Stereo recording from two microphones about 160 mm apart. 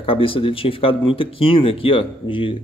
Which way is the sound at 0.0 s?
35° left (ahead or behind).